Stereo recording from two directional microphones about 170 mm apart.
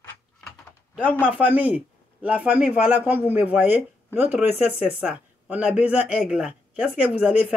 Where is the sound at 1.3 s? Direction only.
10° right (ahead or behind).